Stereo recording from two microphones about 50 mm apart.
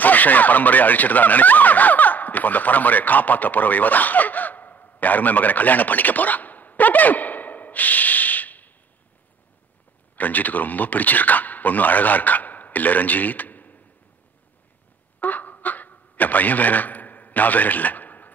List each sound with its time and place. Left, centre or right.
0.0 s speech: left
10.1 s a man's voice: left
15.1 s a sound: left